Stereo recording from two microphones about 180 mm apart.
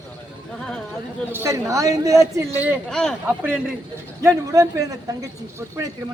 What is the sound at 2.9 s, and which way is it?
Speech, 5° left (ahead or behind).